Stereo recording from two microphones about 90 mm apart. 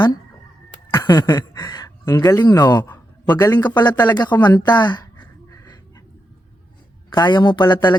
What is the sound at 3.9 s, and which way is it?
Speech, 20° left (ahead or behind).